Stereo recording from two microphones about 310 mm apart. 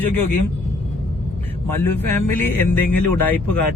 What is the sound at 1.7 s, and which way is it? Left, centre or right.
A man's voice, centre.